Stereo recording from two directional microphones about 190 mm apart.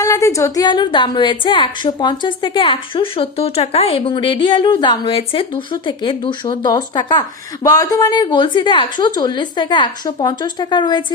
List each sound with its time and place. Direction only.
0.0 s a woman's voice: 15° left (ahead or behind)